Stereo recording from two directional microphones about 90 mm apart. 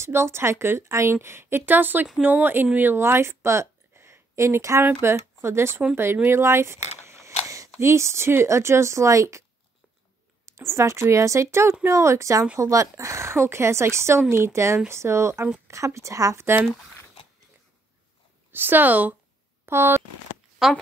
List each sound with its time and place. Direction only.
0.0 s a woman's voice: 30° right (ahead or behind)
10.4 s speech: 35° right (ahead or behind)
18.5 s a woman's voice: 20° right (ahead or behind)
19.6 s a sound: 25° right (ahead or behind)
20.6 s a woman's voice: centre (ahead or behind)